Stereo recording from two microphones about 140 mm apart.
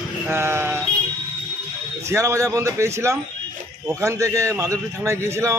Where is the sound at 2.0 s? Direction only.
20° right (ahead or behind).